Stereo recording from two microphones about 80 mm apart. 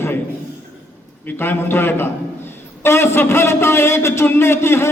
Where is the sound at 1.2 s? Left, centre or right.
Left.